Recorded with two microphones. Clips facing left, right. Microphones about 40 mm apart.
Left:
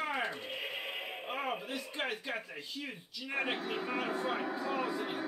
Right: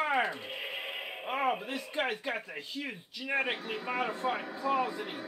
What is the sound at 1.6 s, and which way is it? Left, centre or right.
Speech, right.